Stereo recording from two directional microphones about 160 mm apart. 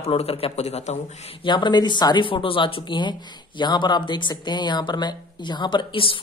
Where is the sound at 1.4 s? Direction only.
30° left (ahead or behind).